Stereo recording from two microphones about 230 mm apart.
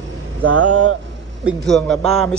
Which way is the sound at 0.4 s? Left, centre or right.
Right.